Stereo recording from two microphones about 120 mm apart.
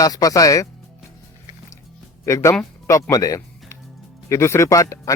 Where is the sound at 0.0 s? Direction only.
30° left (ahead or behind).